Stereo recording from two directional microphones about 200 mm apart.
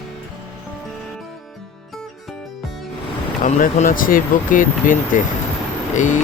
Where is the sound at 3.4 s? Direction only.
40° left (ahead or behind).